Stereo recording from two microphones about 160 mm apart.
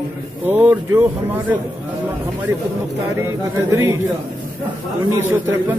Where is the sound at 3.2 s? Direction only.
15° right (ahead or behind).